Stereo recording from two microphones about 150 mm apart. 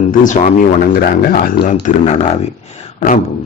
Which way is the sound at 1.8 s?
50° left (ahead or behind).